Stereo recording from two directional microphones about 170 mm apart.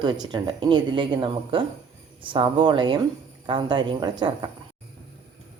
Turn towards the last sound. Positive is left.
turn(degrees=-25)  # may be behind; listen again after turning